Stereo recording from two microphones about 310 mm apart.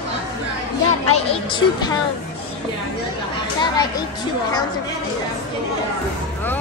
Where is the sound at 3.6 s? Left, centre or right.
Centre.